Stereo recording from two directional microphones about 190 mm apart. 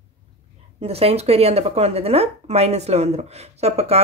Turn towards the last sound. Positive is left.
turn(degrees=-35)  # may be behind; listen again after turning